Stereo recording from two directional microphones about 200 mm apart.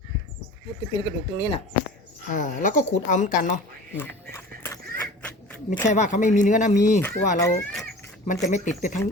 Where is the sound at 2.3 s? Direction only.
40° left (ahead or behind).